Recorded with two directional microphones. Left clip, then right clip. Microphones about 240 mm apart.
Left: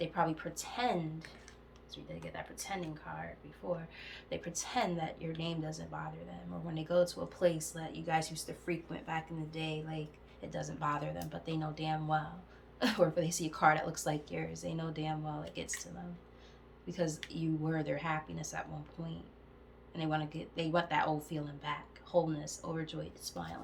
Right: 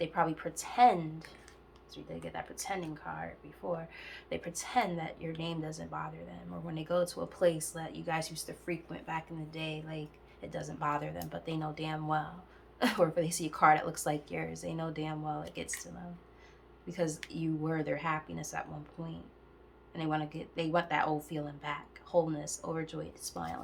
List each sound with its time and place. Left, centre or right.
0.0 s speech: centre
2.1 s speech: centre